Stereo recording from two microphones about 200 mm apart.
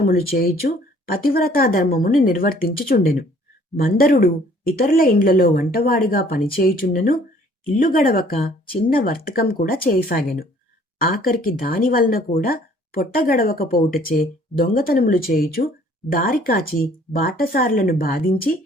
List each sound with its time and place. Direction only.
0.0 s speech: 50° left (ahead or behind)